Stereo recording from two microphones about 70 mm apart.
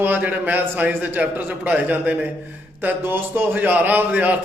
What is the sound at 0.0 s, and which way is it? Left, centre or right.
A man's voice, right.